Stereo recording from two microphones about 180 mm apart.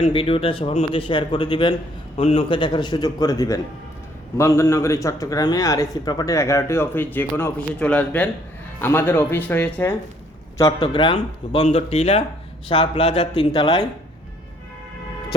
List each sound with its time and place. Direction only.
0.0 s speech: 30° left (ahead or behind); by 9.9 s 10° left (ahead or behind)
10.8 s speech: 30° left (ahead or behind)